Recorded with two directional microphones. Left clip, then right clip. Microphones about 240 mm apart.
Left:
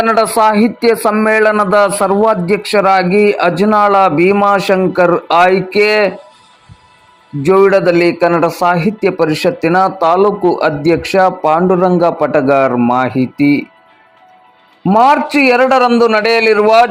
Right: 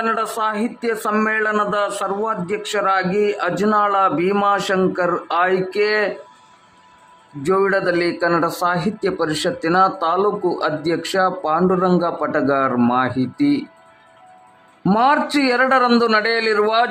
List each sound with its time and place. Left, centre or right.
0.0 s a man's voice: left
7.4 s speech: centre
14.8 s speech: centre